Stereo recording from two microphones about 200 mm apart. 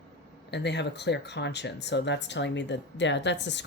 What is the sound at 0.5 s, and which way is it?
Speech, 60° left (ahead or behind).